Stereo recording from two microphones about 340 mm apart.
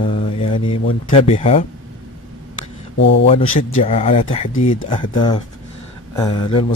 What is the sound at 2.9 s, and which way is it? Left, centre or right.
Speech, left.